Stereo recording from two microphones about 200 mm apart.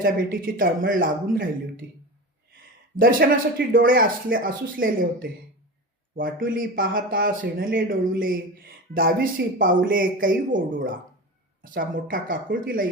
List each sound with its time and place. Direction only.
0.0 s speech: 45° right (ahead or behind)
2.5 s a sound: 45° right (ahead or behind)
3.7 s speech: 45° right (ahead or behind)